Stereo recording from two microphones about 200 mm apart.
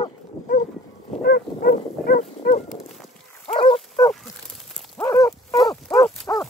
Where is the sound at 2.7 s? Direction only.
Centre (ahead or behind).